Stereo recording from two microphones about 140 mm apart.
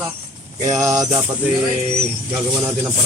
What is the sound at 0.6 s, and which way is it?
Music, 25° right (ahead or behind).